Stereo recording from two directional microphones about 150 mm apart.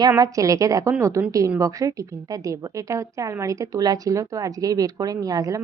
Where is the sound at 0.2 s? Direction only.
20° right (ahead or behind).